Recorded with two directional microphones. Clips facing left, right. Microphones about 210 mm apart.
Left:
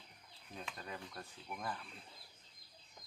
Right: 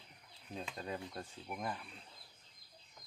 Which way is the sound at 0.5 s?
25° right (ahead or behind).